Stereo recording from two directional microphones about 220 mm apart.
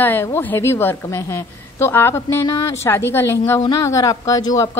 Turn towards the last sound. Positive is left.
turn(degrees=15)  # may be behind; listen again after turning